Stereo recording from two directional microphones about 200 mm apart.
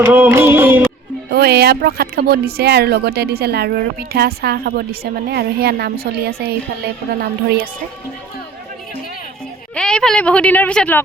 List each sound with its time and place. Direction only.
0.0 s music: 10° right (ahead or behind)
1.3 s speech: 55° right (ahead or behind)
9.7 s a woman's voice: 5° left (ahead or behind)